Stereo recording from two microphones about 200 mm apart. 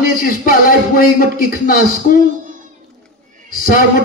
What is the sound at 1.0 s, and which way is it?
A man's voice, 45° left (ahead or behind).